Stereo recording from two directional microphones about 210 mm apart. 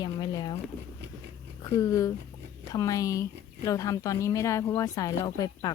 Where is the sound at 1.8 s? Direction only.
15° left (ahead or behind).